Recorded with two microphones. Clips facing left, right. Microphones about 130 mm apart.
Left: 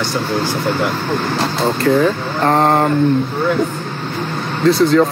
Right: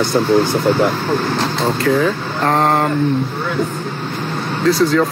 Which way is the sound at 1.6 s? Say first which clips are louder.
Left 2 dB; centre (ahead or behind).